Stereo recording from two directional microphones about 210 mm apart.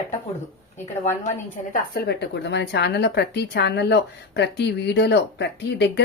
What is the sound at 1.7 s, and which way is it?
Speech, 50° left (ahead or behind).